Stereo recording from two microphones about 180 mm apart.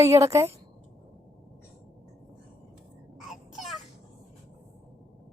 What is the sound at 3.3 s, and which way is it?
Babbling, centre (ahead or behind).